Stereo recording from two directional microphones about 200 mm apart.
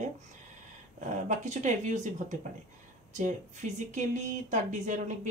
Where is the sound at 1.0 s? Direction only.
40° right (ahead or behind).